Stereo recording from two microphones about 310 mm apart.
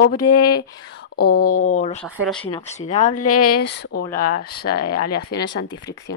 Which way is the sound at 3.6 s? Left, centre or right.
Left.